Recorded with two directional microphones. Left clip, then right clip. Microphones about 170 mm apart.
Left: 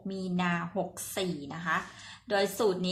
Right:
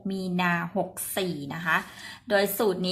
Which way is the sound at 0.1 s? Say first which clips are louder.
Right 5 dB; 25° right (ahead or behind).